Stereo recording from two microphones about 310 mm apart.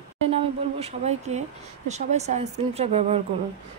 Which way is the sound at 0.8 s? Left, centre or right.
Right.